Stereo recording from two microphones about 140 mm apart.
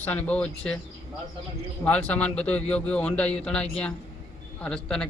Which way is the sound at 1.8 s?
10° left (ahead or behind).